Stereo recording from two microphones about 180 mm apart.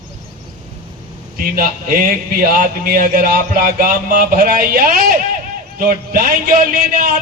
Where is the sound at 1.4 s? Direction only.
55° right (ahead or behind).